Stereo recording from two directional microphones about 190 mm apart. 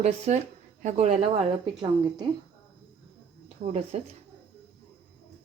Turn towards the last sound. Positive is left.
turn(degrees=-35)  # may be behind; listen again after turning